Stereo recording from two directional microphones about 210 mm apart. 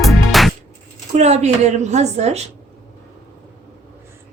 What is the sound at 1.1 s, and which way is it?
A woman's voice, 30° right (ahead or behind).